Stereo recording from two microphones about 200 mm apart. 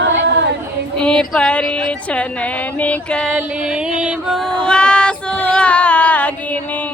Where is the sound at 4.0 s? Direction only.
5° right (ahead or behind).